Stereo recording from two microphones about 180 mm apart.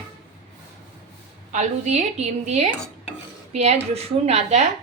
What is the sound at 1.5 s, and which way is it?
Speech, 40° right (ahead or behind).